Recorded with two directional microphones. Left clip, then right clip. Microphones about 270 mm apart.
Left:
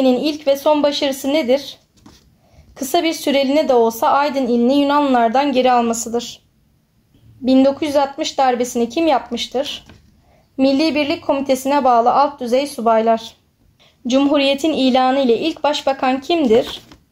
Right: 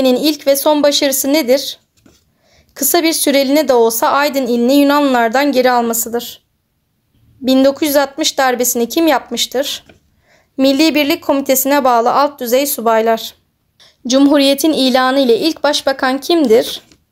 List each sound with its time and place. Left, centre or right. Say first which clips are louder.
0.0 s a woman's voice: right 3 dB; right
7.4 s a woman's voice: right 3 dB; right